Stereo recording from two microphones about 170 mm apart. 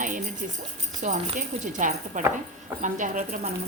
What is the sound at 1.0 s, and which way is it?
Speech, 45° right (ahead or behind).